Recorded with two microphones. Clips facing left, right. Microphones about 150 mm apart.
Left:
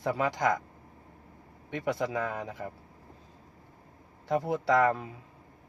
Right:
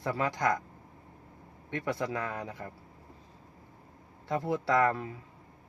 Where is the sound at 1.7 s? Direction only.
20° left (ahead or behind).